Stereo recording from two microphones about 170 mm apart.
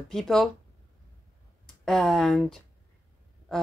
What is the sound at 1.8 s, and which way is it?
Speech, centre (ahead or behind).